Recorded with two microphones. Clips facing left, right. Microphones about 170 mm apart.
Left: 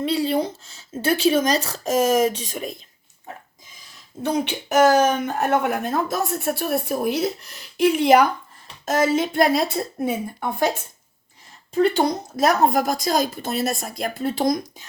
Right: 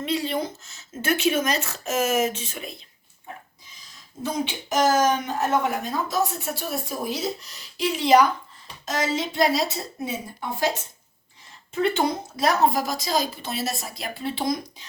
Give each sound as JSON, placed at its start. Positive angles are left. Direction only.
{"t": 0.0, "sound": "speech", "side_deg": 30}
{"t": 4.2, "sound": "a woman's voice", "side_deg": 65}
{"t": 11.7, "sound": "a woman's voice", "side_deg": 35}